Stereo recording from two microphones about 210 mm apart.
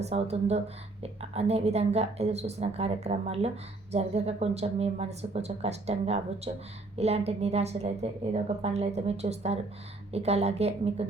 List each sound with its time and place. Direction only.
0.0 s a woman's voice: 30° right (ahead or behind)